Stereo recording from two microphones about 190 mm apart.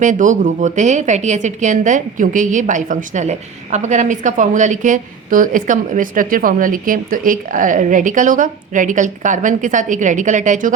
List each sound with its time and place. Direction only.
0.0 s a woman's voice: 40° right (ahead or behind)